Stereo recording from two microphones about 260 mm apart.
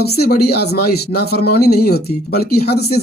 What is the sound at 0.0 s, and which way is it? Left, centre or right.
Speech, left.